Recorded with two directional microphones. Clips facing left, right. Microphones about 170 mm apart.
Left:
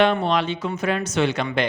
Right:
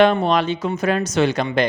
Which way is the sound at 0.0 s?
45° right (ahead or behind).